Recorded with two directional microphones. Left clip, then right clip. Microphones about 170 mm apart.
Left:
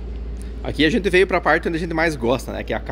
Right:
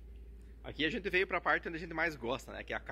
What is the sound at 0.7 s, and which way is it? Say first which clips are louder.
Speech: left 17 dB; 10° left (ahead or behind).